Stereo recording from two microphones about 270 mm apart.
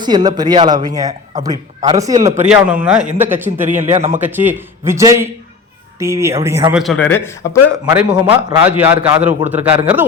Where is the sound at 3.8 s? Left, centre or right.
Right.